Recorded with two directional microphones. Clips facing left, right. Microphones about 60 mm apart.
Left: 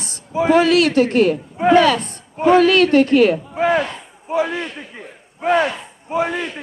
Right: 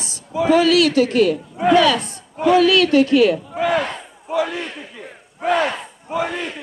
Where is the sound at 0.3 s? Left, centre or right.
Left.